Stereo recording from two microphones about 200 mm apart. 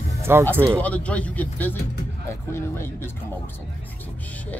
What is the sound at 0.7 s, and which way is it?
Speech, 5° left (ahead or behind).